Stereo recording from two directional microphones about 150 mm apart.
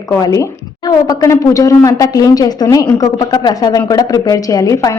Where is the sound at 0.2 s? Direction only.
20° left (ahead or behind).